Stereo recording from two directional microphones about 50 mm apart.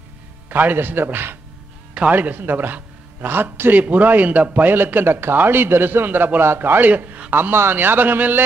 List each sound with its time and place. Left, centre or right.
0.5 s a man's voice: right
3.7 s a man's voice: right
7.3 s a man's voice: right